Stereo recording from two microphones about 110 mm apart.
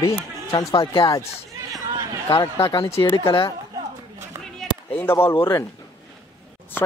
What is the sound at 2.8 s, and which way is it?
Speech, 55° left (ahead or behind).